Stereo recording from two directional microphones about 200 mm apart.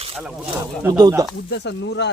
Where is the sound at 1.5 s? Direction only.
60° left (ahead or behind).